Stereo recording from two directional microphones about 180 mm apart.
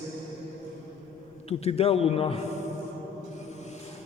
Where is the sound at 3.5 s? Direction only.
40° left (ahead or behind).